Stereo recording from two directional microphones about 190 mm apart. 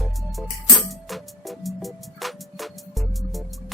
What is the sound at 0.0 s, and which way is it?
Music, centre (ahead or behind).